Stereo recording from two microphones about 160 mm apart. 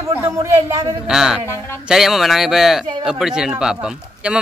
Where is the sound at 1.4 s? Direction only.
15° left (ahead or behind).